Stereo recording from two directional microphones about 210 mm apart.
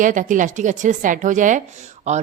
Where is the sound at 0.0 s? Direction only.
40° right (ahead or behind).